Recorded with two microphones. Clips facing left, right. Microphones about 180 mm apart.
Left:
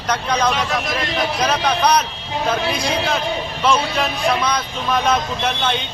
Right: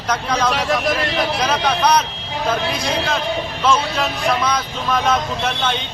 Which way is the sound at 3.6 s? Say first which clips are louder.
Even; centre (ahead or behind).